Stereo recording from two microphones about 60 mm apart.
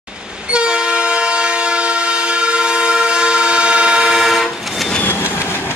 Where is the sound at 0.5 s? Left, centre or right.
Centre.